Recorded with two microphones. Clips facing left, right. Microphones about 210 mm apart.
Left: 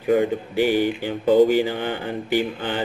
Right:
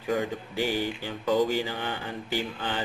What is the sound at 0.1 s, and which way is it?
Speech, 60° left (ahead or behind).